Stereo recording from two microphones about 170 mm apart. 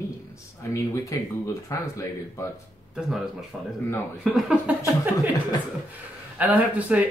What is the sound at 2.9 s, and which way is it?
Speech, centre (ahead or behind).